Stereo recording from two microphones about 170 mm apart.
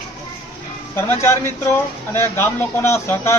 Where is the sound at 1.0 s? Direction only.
15° left (ahead or behind).